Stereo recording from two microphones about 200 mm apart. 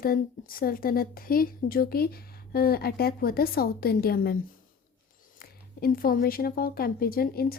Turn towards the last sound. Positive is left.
turn(degrees=50)  # may be behind; listen again after turning